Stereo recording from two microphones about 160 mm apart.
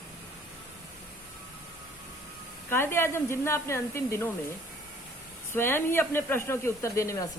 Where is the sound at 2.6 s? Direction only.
15° left (ahead or behind).